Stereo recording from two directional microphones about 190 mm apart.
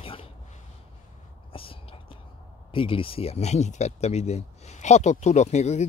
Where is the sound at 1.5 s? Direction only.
30° left (ahead or behind).